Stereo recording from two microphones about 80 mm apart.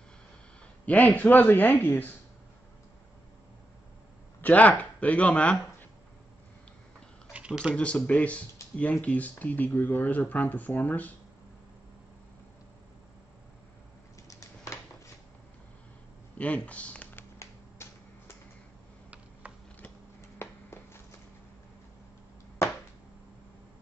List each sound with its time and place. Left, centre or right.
0.8 s speech: left
4.4 s speech: centre
7.3 s speech: centre
7.7 s speech: centre
14.2 s a sound: left
16.3 s speech: centre
17.1 s finger snapping: left
19.4 s a sound: centre
20.2 s a sound: left